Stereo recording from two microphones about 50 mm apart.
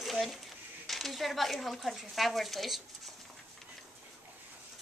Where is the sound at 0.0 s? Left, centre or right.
Centre.